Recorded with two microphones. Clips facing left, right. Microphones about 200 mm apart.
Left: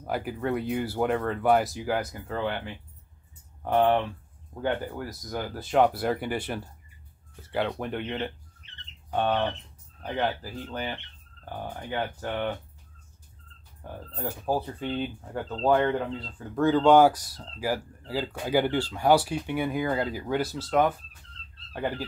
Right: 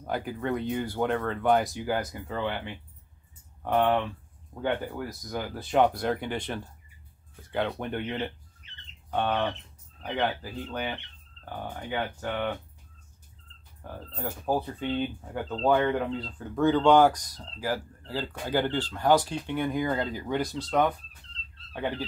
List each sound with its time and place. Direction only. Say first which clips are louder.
0.0 s speech: left 1 dB; 5° left (ahead or behind)
4.6 s speech: even; centre (ahead or behind)
13.9 s speech: left 1 dB; 5° left (ahead or behind)